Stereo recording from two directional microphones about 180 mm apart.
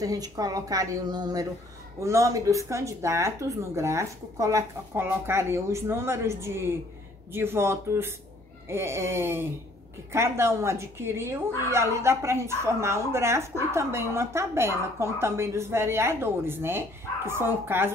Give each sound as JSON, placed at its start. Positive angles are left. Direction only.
{"t": 0.0, "sound": "a woman's voice", "side_deg": -20}